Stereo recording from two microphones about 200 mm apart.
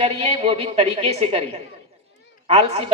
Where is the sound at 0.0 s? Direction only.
30° right (ahead or behind).